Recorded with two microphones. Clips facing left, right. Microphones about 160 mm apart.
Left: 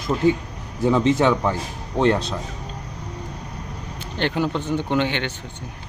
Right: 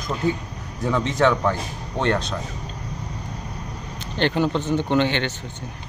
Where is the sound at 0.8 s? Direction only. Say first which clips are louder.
Left 3 dB; 25° left (ahead or behind).